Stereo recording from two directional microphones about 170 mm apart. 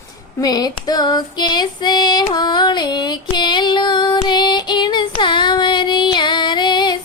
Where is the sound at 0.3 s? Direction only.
25° left (ahead or behind).